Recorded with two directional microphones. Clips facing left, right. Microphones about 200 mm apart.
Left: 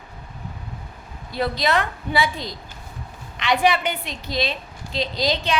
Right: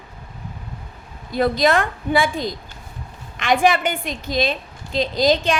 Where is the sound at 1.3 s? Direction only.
50° right (ahead or behind).